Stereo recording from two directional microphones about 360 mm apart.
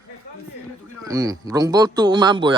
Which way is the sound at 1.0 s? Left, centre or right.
Centre.